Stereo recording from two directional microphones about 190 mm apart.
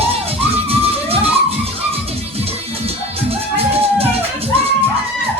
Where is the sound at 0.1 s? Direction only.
30° right (ahead or behind).